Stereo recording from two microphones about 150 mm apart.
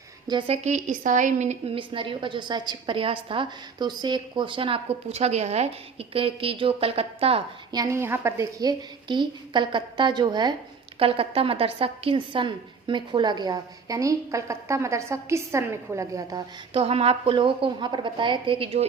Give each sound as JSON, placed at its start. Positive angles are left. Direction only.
{"t": 0.3, "sound": "a woman's voice", "side_deg": -35}
{"t": 7.7, "sound": "a woman's voice", "side_deg": -20}
{"t": 11.0, "sound": "a woman's voice", "side_deg": -40}
{"t": 16.7, "sound": "a woman's voice", "side_deg": -40}